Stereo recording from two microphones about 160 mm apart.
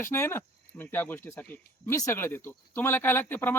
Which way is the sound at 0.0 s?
15° left (ahead or behind).